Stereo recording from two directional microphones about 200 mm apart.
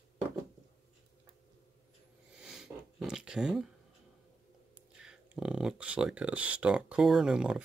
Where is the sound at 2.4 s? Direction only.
Centre (ahead or behind).